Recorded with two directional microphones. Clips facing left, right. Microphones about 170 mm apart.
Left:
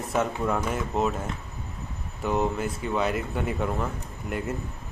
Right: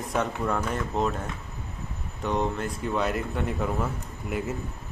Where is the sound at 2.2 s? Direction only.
5° left (ahead or behind).